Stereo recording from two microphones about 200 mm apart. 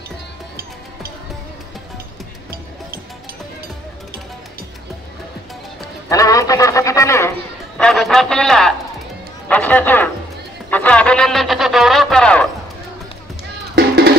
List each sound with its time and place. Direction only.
6.0 s a sound: 15° left (ahead or behind)
7.7 s a man's voice: centre (ahead or behind)
10.7 s music: 5° left (ahead or behind)
13.7 s music: 55° right (ahead or behind)